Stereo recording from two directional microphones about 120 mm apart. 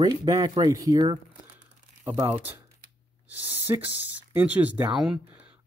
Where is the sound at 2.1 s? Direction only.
15° right (ahead or behind).